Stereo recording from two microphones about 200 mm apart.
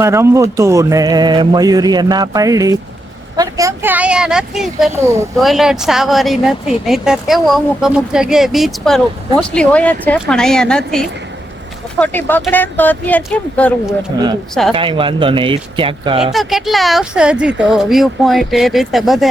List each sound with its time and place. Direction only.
0.0 s speech: 15° right (ahead or behind); by 13.9 s 5° left (ahead or behind)
14.7 s speech: 25° right (ahead or behind)
16.2 s speech: centre (ahead or behind)